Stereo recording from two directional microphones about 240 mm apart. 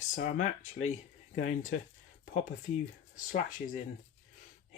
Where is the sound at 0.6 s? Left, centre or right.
Left.